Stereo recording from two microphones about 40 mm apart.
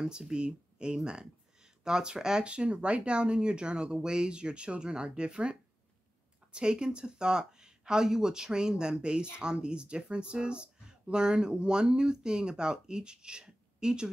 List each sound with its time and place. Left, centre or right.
0.3 s speech: right
2.4 s speech: right